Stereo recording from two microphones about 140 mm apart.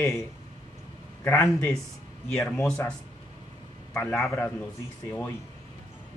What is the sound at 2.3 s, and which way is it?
Speech, 5° left (ahead or behind).